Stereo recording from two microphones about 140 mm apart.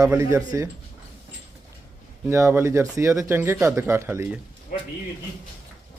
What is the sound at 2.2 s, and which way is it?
Speech, 20° right (ahead or behind).